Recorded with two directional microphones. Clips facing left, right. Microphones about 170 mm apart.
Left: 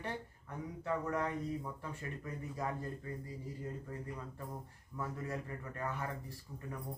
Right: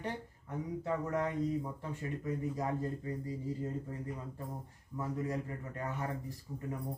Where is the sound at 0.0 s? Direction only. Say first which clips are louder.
Right 2 dB; 20° right (ahead or behind).